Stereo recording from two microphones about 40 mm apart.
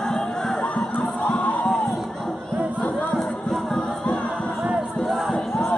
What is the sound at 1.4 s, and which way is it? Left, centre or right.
Crowd, left.